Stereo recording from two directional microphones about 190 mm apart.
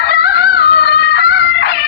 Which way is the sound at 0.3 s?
55° left (ahead or behind).